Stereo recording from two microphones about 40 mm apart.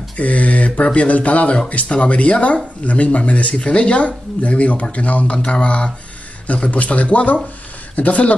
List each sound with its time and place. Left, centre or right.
0.2 s speech: left